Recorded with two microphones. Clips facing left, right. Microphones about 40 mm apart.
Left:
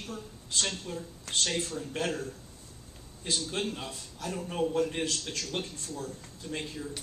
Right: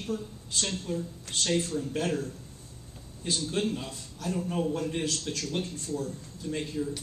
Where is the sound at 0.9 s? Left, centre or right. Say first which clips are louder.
Right 3 dB; centre.